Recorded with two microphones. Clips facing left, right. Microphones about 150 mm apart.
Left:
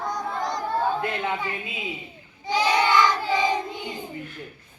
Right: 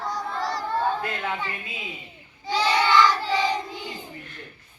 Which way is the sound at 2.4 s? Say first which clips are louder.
Left 1 dB; 15° left (ahead or behind).